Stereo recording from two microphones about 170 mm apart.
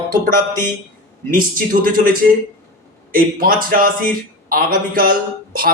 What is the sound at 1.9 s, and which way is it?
A man's voice, 55° right (ahead or behind).